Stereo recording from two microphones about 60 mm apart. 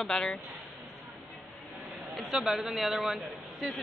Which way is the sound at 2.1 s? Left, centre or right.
Centre.